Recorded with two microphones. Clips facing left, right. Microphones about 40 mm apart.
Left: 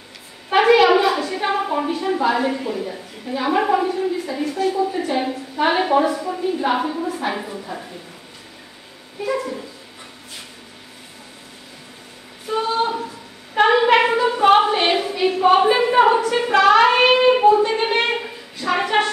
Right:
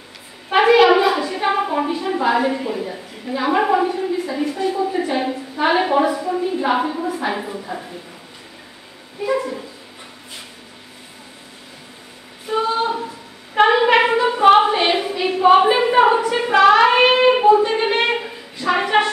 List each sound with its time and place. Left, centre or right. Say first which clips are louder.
0.5 s a woman's voice: right 1 dB; centre
9.2 s dog: right 2 dB; centre
12.4 s a sound: right 1 dB; centre